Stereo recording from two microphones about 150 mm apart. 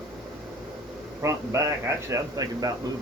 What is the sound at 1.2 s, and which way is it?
Speech, 20° right (ahead or behind).